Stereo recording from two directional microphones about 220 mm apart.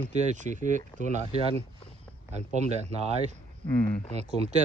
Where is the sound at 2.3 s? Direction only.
30° right (ahead or behind).